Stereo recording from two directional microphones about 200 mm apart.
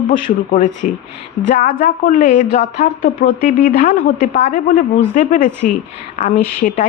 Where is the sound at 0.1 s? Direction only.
40° left (ahead or behind).